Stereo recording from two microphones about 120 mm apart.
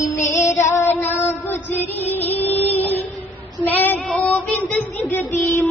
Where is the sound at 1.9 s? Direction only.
15° left (ahead or behind).